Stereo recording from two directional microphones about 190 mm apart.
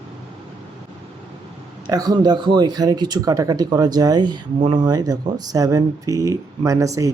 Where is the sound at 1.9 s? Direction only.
20° right (ahead or behind).